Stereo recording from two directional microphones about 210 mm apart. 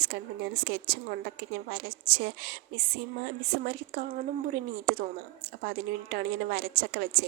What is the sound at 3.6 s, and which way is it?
Speech, 45° right (ahead or behind).